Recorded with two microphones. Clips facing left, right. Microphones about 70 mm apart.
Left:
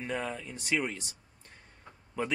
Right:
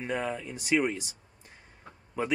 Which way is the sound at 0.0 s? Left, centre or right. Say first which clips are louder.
Right 3 dB; centre.